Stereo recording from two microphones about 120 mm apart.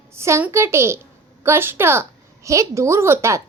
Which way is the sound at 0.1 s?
20° right (ahead or behind).